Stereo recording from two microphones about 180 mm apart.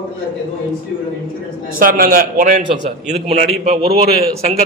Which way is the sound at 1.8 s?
55° right (ahead or behind).